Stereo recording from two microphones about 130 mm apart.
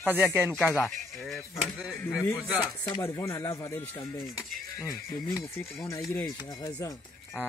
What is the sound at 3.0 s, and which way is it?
Speech, 25° left (ahead or behind).